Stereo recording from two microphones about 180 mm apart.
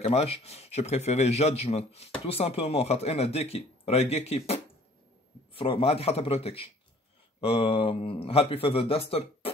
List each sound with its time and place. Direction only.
0.0 s speech: 35° left (ahead or behind)